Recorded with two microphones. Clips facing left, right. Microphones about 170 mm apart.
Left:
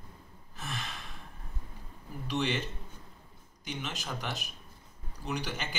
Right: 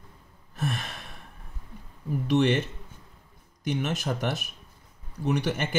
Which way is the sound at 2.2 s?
50° right (ahead or behind).